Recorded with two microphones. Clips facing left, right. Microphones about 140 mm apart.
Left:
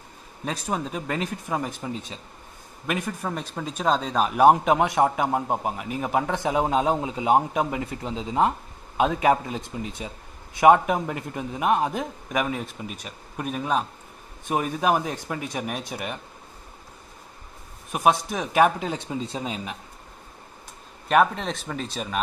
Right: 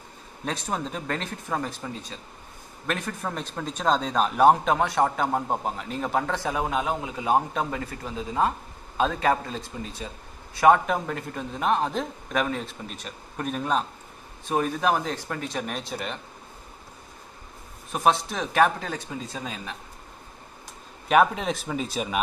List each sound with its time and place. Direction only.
0.5 s a man's voice: 5° left (ahead or behind)
2.9 s a man's voice: 10° left (ahead or behind)
17.9 s a man's voice: 10° left (ahead or behind)
21.1 s speech: 5° right (ahead or behind)